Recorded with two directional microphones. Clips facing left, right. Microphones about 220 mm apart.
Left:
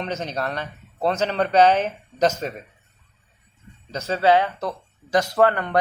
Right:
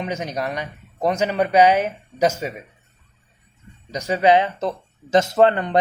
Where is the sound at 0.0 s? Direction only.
10° right (ahead or behind).